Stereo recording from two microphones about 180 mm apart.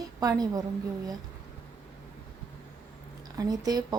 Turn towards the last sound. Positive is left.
turn(degrees=-20)  # may be behind; listen again after turning